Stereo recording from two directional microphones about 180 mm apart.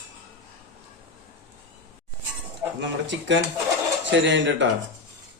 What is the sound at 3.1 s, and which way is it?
Speech, 90° right.